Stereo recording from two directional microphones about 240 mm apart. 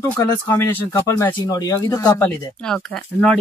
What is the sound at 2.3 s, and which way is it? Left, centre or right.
Speech, centre.